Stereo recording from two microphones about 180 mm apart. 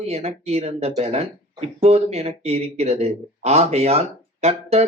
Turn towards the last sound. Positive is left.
turn(degrees=-35)  # may be behind; listen again after turning